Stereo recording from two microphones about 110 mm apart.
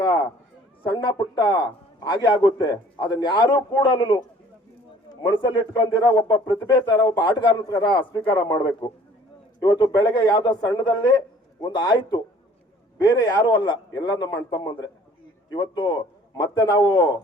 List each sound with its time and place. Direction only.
0.8 s a man's voice: 40° left (ahead or behind)